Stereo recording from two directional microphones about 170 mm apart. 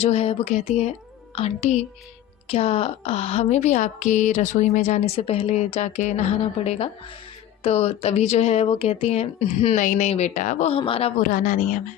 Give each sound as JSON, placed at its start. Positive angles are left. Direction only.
{"t": 0.0, "sound": "a woman's voice", "side_deg": 40}
{"t": 11.2, "sound": "a woman's voice", "side_deg": 50}